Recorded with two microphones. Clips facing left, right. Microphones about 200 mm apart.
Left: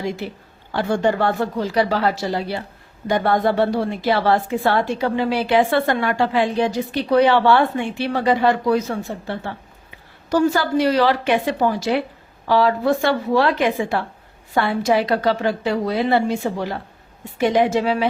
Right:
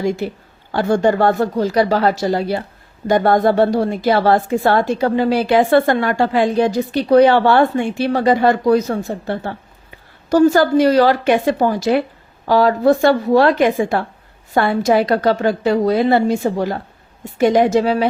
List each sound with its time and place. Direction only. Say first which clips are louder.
0.7 s a woman's voice: right 4 dB; 45° right (ahead or behind)